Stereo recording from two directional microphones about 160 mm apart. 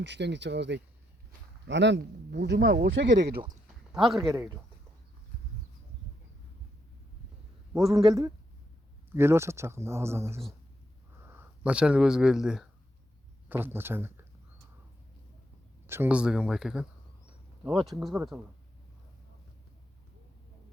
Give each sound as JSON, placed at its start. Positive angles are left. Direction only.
{"t": 0.0, "sound": "speech", "side_deg": -90}
{"t": 4.2, "sound": "speech", "side_deg": -15}
{"t": 7.7, "sound": "a man's voice", "side_deg": 0}
{"t": 7.9, "sound": "speech", "side_deg": -20}
{"t": 15.9, "sound": "speech", "side_deg": -10}
{"t": 17.8, "sound": "speech", "side_deg": 0}